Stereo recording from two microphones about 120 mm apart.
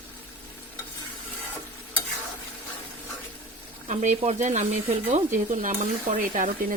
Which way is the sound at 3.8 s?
80° right.